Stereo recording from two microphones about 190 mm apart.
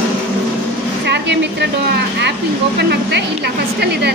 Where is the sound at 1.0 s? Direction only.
65° right (ahead or behind).